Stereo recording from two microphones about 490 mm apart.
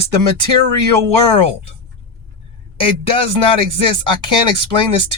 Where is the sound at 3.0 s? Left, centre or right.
Right.